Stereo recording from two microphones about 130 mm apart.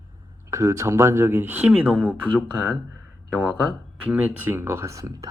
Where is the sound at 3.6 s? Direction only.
15° right (ahead or behind).